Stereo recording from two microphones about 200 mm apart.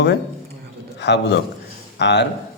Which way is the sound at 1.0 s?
60° left (ahead or behind).